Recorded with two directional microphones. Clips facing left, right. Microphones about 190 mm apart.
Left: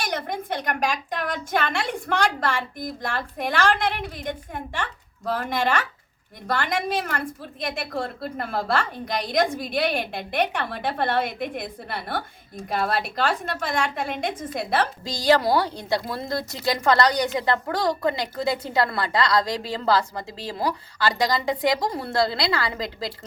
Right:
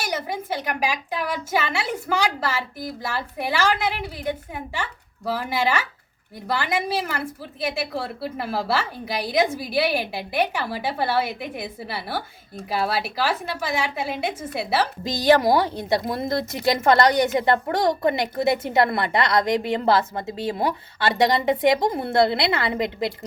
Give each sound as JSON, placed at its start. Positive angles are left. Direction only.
{"t": 0.0, "sound": "a woman's voice", "side_deg": -5}
{"t": 15.0, "sound": "a woman's voice", "side_deg": -20}